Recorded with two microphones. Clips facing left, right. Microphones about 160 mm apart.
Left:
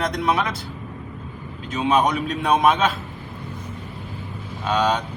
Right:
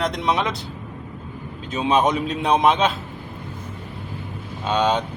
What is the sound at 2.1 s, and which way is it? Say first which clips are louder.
Speech: right 1 dB; 20° right (ahead or behind).